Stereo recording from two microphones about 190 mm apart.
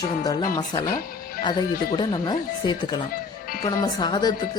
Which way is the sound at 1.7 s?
50° left (ahead or behind).